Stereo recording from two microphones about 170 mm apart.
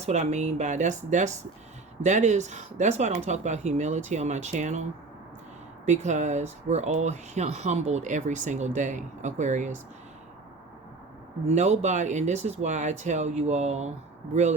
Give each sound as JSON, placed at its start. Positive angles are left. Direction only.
{"t": 0.0, "sound": "speech", "side_deg": -40}
{"t": 11.4, "sound": "speech", "side_deg": -40}